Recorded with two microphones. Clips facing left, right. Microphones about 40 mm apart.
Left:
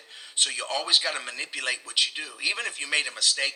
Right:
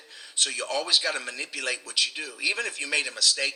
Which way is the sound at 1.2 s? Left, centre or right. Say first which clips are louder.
Left 1 dB; left.